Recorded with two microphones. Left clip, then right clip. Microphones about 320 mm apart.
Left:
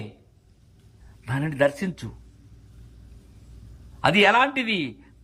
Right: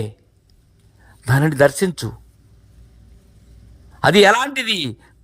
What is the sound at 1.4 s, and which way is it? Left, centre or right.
Speech, centre.